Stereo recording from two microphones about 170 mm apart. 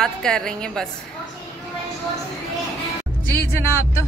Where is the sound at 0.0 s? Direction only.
5° left (ahead or behind).